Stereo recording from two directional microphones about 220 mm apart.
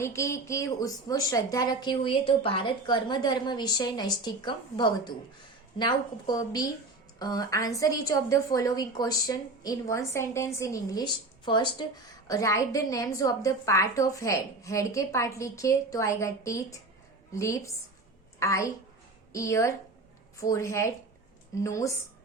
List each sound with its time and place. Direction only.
0.0 s a woman's voice: 15° left (ahead or behind)